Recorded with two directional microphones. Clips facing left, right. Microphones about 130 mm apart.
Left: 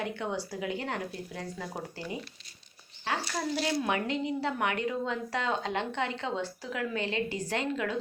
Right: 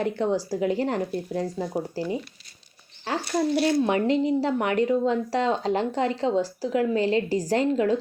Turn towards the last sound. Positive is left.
turn(degrees=-35)  # may be behind; listen again after turning